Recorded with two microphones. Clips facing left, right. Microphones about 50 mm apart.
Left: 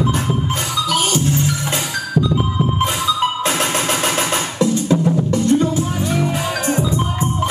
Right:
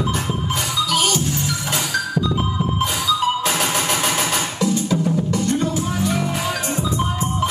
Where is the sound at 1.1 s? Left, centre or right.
Left.